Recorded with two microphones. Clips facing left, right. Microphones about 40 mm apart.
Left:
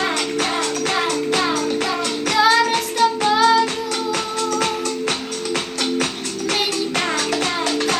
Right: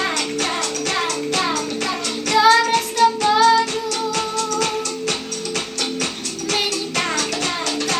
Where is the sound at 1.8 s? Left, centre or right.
Centre.